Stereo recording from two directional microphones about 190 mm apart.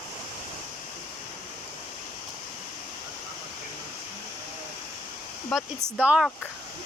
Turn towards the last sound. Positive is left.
turn(degrees=-5)  # may be behind; listen again after turning